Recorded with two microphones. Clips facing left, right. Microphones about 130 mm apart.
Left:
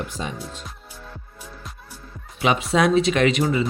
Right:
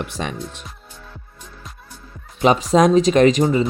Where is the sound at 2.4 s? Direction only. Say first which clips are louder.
Right 5 dB; 35° right (ahead or behind).